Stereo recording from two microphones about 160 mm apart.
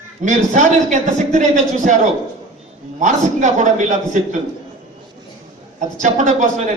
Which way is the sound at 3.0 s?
50° right (ahead or behind).